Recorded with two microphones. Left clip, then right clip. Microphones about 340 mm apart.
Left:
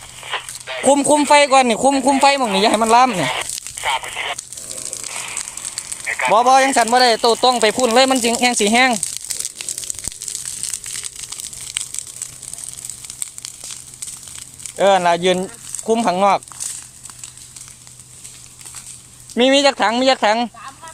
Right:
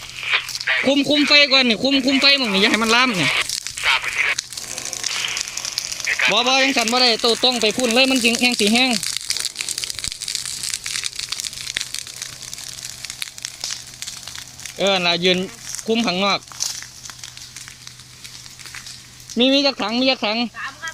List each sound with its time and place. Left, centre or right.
0.2 s a sound: centre
1.1 s speech: centre
3.2 s a sound: left
6.1 s speech: centre
7.7 s speech: left
8.8 s crumpling: left
14.8 s speech: centre
19.4 s speech: left